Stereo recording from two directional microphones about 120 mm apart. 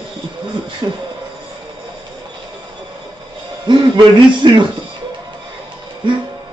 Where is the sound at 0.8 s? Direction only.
35° right (ahead or behind).